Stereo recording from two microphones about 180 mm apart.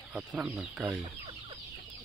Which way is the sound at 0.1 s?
5° right (ahead or behind).